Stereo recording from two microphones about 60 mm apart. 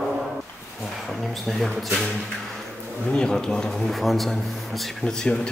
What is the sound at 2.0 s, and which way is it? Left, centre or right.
Speech, centre.